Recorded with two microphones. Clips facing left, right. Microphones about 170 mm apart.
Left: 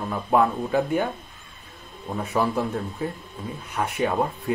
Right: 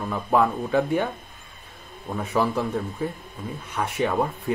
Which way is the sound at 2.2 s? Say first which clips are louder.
Even; 5° left (ahead or behind).